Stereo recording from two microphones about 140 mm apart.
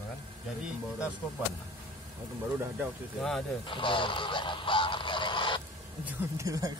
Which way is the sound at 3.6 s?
35° left (ahead or behind).